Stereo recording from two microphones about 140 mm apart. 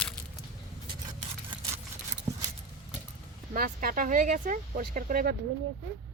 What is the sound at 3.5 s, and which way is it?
Speech, 80° right.